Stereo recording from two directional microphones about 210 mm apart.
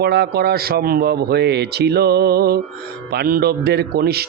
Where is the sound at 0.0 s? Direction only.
50° right (ahead or behind).